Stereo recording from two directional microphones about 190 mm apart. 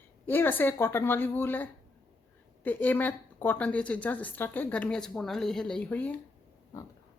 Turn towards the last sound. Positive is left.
turn(degrees=10)  # may be behind; listen again after turning